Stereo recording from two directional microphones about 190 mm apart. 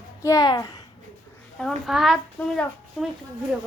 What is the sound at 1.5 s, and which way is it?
Speech, centre (ahead or behind).